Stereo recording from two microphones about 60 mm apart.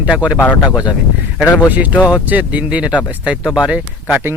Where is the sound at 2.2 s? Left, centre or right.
Right.